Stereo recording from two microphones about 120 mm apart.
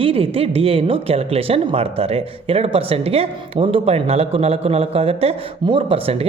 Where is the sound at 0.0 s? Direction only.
50° right (ahead or behind).